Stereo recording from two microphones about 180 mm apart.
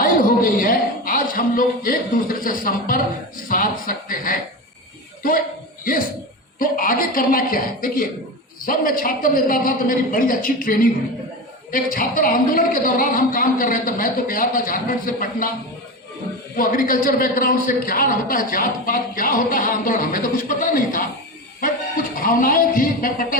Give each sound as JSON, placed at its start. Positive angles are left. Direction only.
{"t": 0.0, "sound": "a man's voice", "side_deg": 50}
{"t": 5.8, "sound": "a man's voice", "side_deg": 50}
{"t": 16.6, "sound": "a man's voice", "side_deg": 50}
{"t": 22.1, "sound": "a man's voice", "side_deg": 50}